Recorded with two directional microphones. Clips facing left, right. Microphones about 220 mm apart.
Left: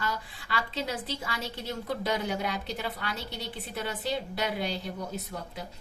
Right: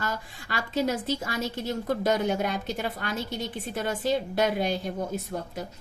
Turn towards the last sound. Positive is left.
turn(degrees=-50)  # may be behind; listen again after turning